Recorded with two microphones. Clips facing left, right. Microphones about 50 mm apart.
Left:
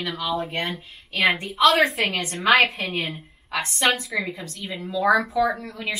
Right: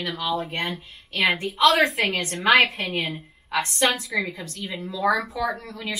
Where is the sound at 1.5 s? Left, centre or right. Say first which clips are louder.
Even; centre.